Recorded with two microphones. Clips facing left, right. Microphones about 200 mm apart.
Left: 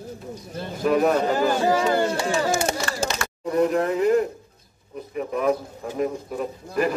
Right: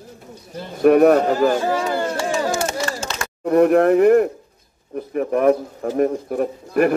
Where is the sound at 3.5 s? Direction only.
65° right (ahead or behind).